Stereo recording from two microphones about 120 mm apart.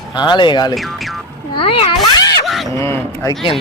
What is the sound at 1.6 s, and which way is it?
Speech, 50° left (ahead or behind).